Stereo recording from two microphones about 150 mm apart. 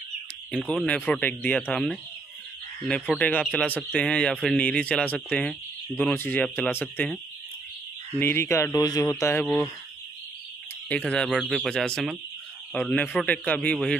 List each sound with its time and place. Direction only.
0.7 s a man's voice: 10° left (ahead or behind)
3.2 s a man's voice: 10° left (ahead or behind)
8.2 s speech: 15° left (ahead or behind)
9.4 s speech: 5° left (ahead or behind)
10.9 s a man's voice: 5° left (ahead or behind)